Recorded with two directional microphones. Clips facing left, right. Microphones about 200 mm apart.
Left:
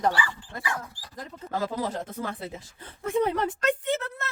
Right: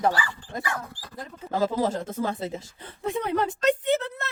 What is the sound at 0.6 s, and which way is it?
Speech, 50° right (ahead or behind).